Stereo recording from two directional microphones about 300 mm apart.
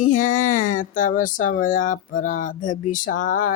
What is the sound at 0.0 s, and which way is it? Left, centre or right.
Speech, left.